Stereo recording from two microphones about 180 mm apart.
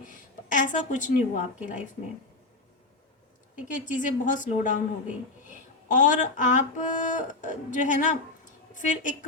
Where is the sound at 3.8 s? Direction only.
45° left (ahead or behind).